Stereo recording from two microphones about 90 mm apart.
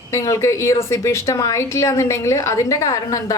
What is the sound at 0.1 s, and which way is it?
A woman's voice, 35° left (ahead or behind).